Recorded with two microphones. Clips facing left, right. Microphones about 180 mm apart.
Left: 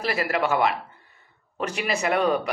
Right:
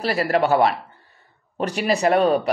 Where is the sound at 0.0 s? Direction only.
35° right (ahead or behind).